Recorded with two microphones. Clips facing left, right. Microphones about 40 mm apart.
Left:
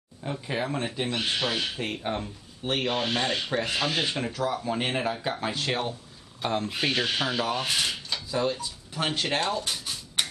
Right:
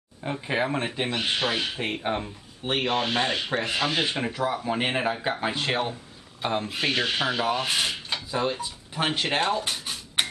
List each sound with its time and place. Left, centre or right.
0.2 s speech: right